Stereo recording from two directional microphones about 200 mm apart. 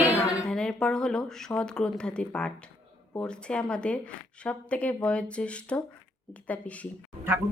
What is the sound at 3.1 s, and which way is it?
A woman's voice, 5° left (ahead or behind).